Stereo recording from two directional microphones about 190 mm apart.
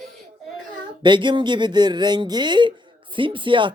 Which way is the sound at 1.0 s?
25° right (ahead or behind).